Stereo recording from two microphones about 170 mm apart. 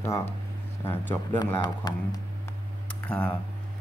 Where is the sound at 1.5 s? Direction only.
25° left (ahead or behind).